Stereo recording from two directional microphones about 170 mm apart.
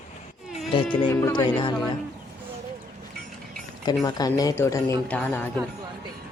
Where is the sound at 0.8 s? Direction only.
15° left (ahead or behind).